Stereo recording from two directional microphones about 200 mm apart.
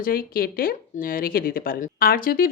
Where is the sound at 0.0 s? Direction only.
45° left (ahead or behind).